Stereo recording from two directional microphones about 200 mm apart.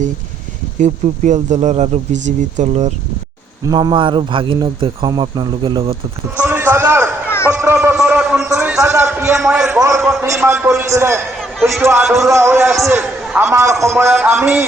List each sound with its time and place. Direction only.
0.8 s speech: 35° right (ahead or behind)
3.6 s a man's voice: 20° right (ahead or behind)
6.4 s a sound: 10° right (ahead or behind)
7.3 s a sound: 15° left (ahead or behind)
7.5 s a man's voice: 10° right (ahead or behind)
8.4 s a man's voice: 15° right (ahead or behind)
9.8 s a man's voice: 15° right (ahead or behind)